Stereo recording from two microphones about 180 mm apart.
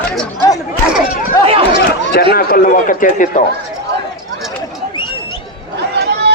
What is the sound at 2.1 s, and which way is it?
A man's voice, 60° left (ahead or behind).